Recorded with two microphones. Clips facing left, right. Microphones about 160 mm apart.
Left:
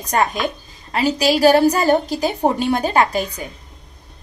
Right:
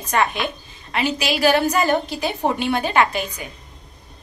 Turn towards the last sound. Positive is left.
turn(degrees=35)  # may be behind; listen again after turning